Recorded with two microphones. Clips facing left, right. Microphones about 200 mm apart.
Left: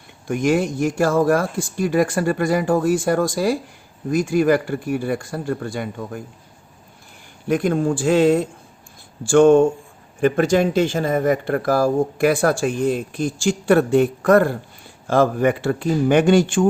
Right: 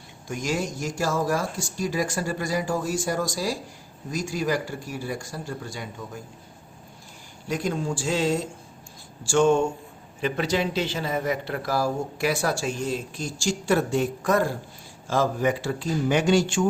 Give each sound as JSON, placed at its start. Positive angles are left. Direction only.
{"t": 0.3, "sound": "speech", "side_deg": 55}
{"t": 7.4, "sound": "speech", "side_deg": 55}